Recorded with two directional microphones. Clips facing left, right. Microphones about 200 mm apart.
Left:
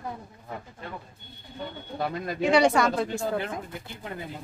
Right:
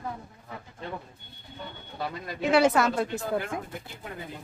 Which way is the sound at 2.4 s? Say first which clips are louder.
Left 1 dB; 5° right (ahead or behind).